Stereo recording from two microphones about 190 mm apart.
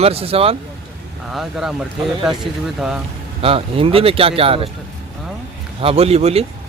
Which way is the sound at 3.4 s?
30° right (ahead or behind).